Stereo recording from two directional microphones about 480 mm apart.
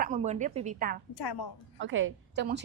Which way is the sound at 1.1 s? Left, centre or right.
Left.